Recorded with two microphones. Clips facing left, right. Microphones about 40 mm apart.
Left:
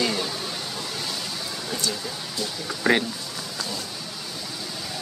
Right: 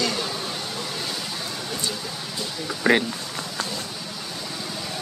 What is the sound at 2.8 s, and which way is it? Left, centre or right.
Speech, centre.